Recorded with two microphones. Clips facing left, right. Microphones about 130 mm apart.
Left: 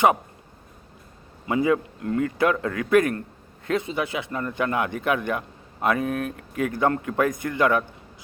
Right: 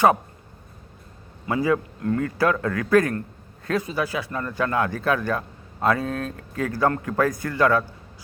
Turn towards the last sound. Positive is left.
turn(degrees=20)  # may be behind; listen again after turning